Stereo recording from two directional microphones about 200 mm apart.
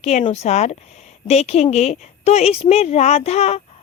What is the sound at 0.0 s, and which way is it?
A woman's voice, 35° left (ahead or behind).